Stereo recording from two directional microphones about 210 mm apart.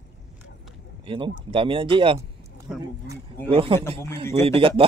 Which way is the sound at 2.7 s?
Centre (ahead or behind).